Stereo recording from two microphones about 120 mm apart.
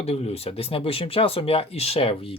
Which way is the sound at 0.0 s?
60° left (ahead or behind).